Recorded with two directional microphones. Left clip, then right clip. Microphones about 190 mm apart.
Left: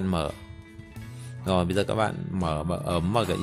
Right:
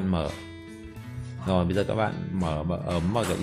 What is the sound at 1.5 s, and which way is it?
Speech, 35° left (ahead or behind).